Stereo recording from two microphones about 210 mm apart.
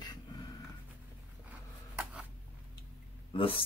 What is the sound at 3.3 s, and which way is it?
Speech, 25° left (ahead or behind).